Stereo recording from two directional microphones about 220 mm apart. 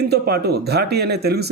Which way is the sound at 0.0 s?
45° right (ahead or behind).